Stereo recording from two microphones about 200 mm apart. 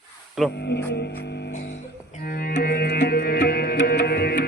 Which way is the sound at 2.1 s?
45° left (ahead or behind).